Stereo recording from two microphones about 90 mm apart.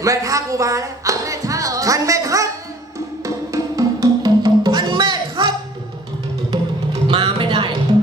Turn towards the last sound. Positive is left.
turn(degrees=-65)  # may be behind; listen again after turning